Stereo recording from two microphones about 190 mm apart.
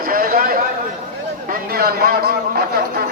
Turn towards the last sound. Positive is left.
turn(degrees=-55)  # may be behind; listen again after turning